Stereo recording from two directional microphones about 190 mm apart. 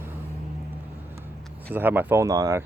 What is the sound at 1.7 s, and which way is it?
Speech, 10° right (ahead or behind).